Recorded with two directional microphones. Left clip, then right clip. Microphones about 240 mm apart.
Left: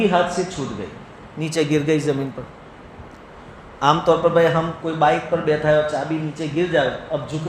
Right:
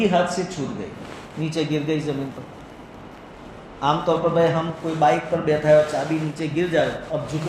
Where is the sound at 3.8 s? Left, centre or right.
Left.